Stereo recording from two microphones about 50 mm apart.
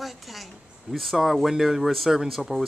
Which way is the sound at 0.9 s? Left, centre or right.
Centre.